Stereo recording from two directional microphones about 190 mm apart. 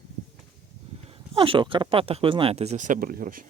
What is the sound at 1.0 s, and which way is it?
Speech, 30° right (ahead or behind).